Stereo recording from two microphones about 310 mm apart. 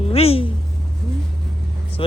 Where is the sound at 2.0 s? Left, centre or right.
Centre.